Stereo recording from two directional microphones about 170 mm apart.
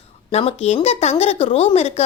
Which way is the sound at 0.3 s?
35° left (ahead or behind).